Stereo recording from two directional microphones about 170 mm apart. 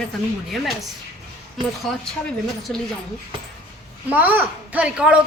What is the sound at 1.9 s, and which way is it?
Speech, centre (ahead or behind).